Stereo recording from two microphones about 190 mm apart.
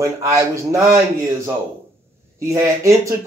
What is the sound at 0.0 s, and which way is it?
A man's voice, 15° right (ahead or behind).